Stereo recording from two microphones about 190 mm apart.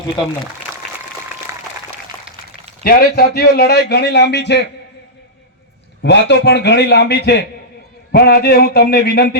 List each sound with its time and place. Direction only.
1.5 s applause: 15° right (ahead or behind)
2.8 s a man's voice: 55° left (ahead or behind)
6.0 s a man's voice: 65° left (ahead or behind)